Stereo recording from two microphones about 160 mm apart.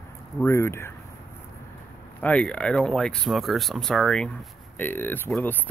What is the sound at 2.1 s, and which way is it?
Speech, 10° left (ahead or behind).